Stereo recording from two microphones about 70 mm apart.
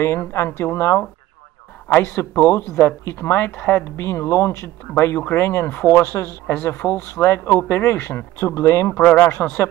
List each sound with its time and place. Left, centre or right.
0.0 s speech: left